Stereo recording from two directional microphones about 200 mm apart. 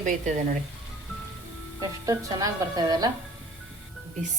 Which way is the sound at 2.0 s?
15° right (ahead or behind).